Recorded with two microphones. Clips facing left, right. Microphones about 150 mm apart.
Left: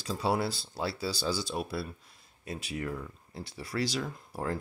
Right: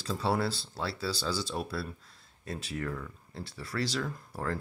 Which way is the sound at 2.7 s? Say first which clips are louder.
Left 1 dB; 20° left (ahead or behind).